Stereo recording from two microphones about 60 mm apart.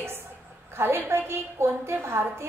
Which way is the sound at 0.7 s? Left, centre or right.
Right.